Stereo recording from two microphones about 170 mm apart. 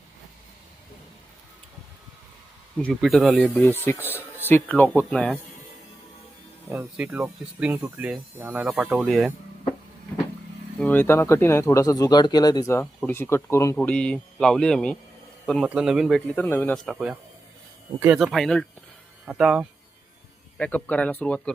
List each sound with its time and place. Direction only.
2.7 s a man's voice: 5° left (ahead or behind)
3.5 s speech: 15° left (ahead or behind)
6.7 s a man's voice: 10° right (ahead or behind)
10.8 s speech: 10° left (ahead or behind)
12.8 s a man's voice: 10° left (ahead or behind)
20.6 s speech: 10° left (ahead or behind)